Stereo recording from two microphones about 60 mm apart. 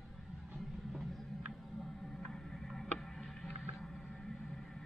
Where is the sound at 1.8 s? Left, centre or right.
Centre.